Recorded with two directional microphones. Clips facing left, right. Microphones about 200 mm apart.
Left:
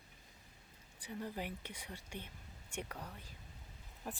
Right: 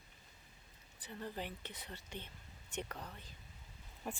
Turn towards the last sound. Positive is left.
turn(degrees=0)  # may be behind; listen again after turning